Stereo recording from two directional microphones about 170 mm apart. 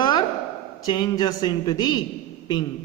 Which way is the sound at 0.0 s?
25° left (ahead or behind).